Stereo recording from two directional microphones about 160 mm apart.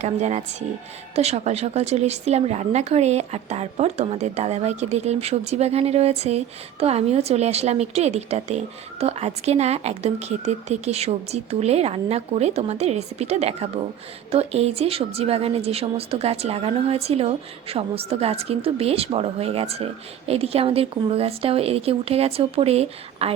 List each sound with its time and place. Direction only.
0.0 s speech: 45° right (ahead or behind)